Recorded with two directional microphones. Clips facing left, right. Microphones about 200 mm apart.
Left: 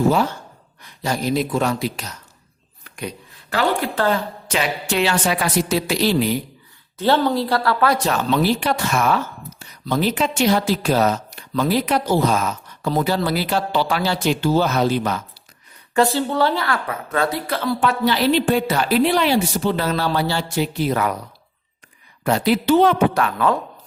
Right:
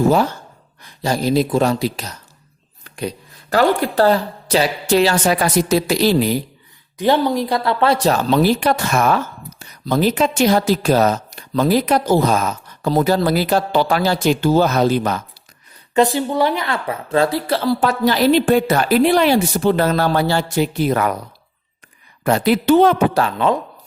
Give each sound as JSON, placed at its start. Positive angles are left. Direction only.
{"t": 1.0, "sound": "a woman's voice", "side_deg": -30}
{"t": 2.8, "sound": "a sound", "side_deg": -35}
{"t": 3.6, "sound": "a woman's voice", "side_deg": -35}
{"t": 7.0, "sound": "speech", "side_deg": -15}
{"t": 16.0, "sound": "speech", "side_deg": -15}
{"t": 22.2, "sound": "speech", "side_deg": -55}
{"t": 23.1, "sound": "a woman's voice", "side_deg": -25}